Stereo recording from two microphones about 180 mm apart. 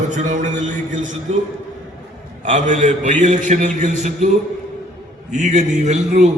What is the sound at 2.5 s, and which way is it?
A man's voice, 45° right (ahead or behind).